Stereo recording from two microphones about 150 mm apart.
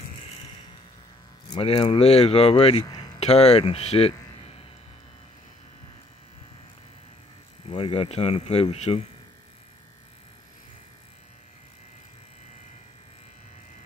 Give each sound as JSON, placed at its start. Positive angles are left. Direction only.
{"t": 1.5, "sound": "speech", "side_deg": 40}
{"t": 7.7, "sound": "speech", "side_deg": 35}